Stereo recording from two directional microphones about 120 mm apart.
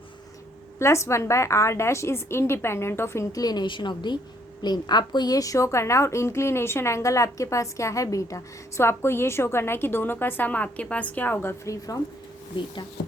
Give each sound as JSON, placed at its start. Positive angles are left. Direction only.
{"t": 0.8, "sound": "a woman's voice", "side_deg": 25}